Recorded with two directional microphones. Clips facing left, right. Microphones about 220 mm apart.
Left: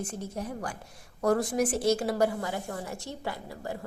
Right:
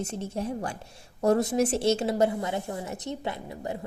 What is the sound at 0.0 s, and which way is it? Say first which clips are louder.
A woman's voice: right 4 dB; 25° right (ahead or behind).